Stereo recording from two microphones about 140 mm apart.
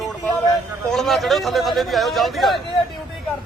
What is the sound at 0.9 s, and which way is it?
A man's voice, centre (ahead or behind).